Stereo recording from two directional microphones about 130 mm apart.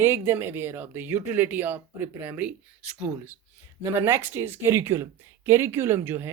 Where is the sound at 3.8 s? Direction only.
20° right (ahead or behind).